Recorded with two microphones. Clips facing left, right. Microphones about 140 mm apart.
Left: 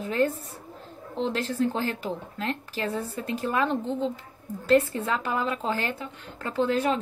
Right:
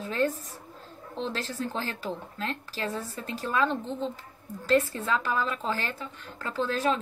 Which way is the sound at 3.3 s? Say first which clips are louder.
Left 1 dB; 10° left (ahead or behind).